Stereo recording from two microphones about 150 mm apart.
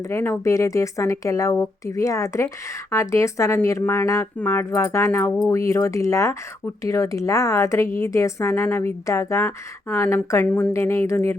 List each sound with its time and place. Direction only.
0.1 s speech: 15° left (ahead or behind)